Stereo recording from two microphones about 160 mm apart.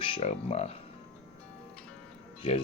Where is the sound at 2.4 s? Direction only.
35° left (ahead or behind).